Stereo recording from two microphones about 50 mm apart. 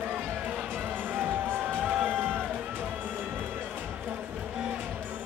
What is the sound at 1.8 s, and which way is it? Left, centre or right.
Music, right.